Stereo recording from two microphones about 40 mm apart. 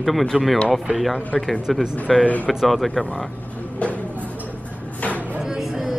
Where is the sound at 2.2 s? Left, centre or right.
Left.